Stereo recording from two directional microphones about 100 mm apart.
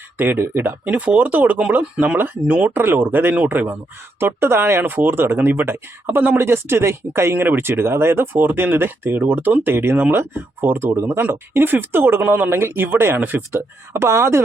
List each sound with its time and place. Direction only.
0.2 s speech: 20° right (ahead or behind)